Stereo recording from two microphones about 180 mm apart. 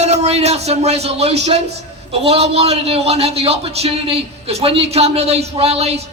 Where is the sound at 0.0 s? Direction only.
40° right (ahead or behind).